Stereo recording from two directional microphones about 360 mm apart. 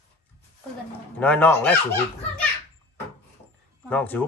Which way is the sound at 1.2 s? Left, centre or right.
Centre.